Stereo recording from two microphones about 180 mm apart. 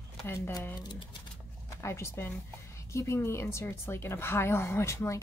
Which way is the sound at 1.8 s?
15° left (ahead or behind).